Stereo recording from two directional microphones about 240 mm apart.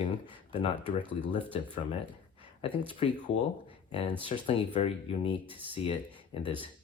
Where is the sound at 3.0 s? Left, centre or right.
Left.